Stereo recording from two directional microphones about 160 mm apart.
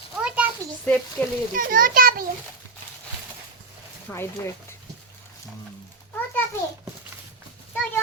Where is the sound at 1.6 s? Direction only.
60° right (ahead or behind).